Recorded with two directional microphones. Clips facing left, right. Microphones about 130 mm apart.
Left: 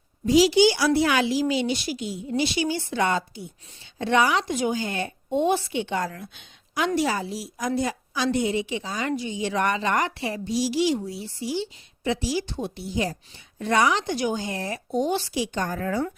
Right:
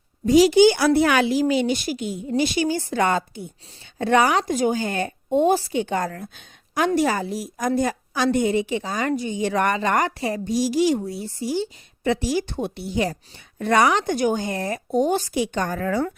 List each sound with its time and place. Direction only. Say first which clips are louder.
0.3 s a woman's voice: right 4 dB; 50° right (ahead or behind); by 16.1 s 75° right (ahead or behind)